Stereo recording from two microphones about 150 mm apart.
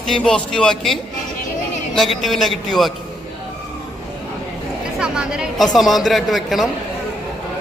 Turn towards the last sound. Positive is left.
turn(degrees=0)  # may be behind; listen again after turning